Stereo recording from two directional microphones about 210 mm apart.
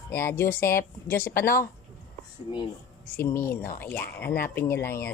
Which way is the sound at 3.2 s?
10° left (ahead or behind).